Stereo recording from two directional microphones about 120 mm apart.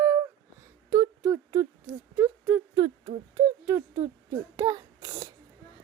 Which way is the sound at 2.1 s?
15° right (ahead or behind).